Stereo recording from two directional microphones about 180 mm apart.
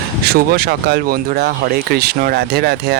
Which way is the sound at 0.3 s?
60° right (ahead or behind).